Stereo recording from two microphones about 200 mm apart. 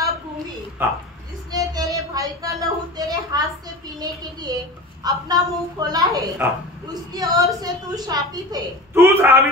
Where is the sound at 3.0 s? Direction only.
20° right (ahead or behind).